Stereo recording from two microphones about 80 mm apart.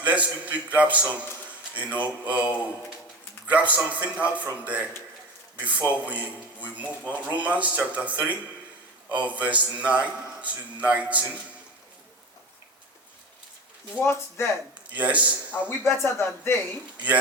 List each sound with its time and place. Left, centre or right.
0.0 s a man's voice: centre
14.0 s speech: left
14.9 s a man's voice: centre
16.0 s speech: left